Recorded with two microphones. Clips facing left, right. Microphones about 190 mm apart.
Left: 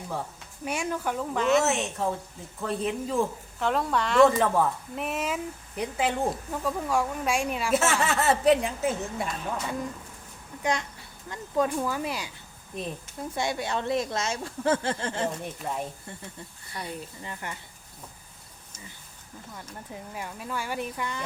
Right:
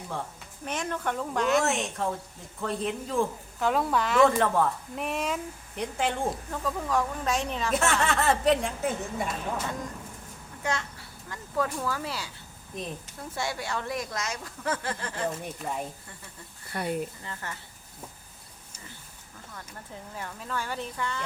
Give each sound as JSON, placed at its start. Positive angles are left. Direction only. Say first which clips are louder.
{"t": 0.6, "sound": "a woman's voice", "louder": "left 2 dB", "side_deg": 10}
{"t": 10.6, "sound": "a child's voice", "louder": "left 3 dB", "side_deg": 15}
{"t": 13.3, "sound": "a woman's voice", "louder": "left 3 dB", "side_deg": 20}
{"t": 15.6, "sound": "a woman's voice", "louder": "left 1 dB", "side_deg": -5}
{"t": 16.7, "sound": "speech", "louder": "right 6 dB", "side_deg": -55}
{"t": 17.2, "sound": "speech", "louder": "left 2 dB", "side_deg": 15}
{"t": 19.5, "sound": "speech", "louder": "left 2 dB", "side_deg": 15}